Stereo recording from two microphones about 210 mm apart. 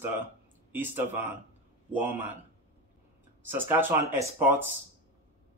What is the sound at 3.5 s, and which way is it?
Speech, 10° right (ahead or behind).